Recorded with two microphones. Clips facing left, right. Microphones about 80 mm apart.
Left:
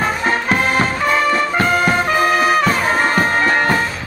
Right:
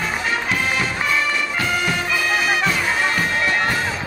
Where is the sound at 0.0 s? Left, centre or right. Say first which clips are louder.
Left 5 dB; left.